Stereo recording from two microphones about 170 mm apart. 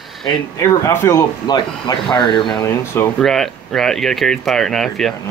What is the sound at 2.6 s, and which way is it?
Speech, 15° left (ahead or behind).